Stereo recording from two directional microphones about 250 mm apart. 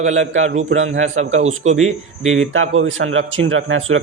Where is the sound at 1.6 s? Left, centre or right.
Right.